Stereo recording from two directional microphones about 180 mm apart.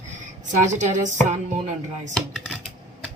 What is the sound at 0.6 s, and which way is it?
A woman's voice, 45° right (ahead or behind).